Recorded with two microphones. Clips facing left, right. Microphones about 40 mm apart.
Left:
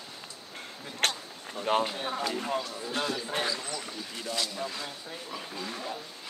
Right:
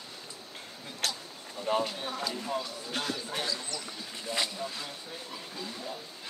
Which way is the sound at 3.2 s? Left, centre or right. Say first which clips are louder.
Left 3 dB; left.